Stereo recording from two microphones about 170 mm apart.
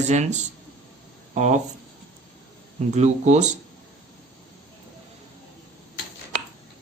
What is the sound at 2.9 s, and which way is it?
Speech, 40° right (ahead or behind).